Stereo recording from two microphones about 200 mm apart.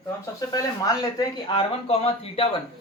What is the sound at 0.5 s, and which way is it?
Speech, 20° left (ahead or behind).